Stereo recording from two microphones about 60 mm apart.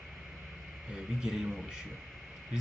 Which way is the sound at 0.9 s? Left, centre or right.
Centre.